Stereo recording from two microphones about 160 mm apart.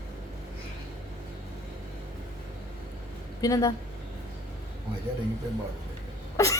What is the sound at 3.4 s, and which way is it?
Speech, 20° left (ahead or behind).